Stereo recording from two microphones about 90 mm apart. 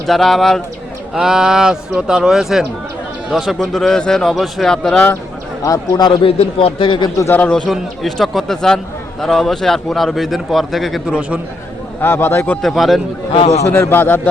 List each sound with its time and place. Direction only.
0.1 s a man's voice: centre (ahead or behind)
5.6 s a man's voice: 45° left (ahead or behind)
6.2 s a man's voice: 85° left; by 7.1 s 65° left (ahead or behind)
7.2 s a man's voice: 25° left (ahead or behind)
7.4 s a man's voice: 15° left (ahead or behind)
7.7 s a man's voice: centre (ahead or behind)
11.1 s a man's voice: 15° right (ahead or behind)
12.0 s a man's voice: 25° left (ahead or behind)
12.6 s a man's voice: centre (ahead or behind)
13.7 s a man's voice: 25° left (ahead or behind)